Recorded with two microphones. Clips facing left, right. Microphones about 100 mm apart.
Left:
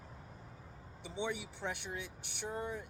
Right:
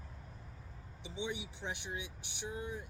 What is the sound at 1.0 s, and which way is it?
Speech, 55° left (ahead or behind).